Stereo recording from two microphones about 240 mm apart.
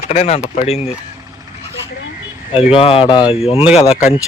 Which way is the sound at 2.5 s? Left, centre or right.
Left.